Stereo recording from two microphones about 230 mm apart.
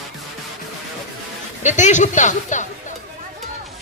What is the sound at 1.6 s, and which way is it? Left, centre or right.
Speech, left.